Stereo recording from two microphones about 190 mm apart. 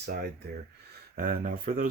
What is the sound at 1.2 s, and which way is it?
Speech, 50° right (ahead or behind).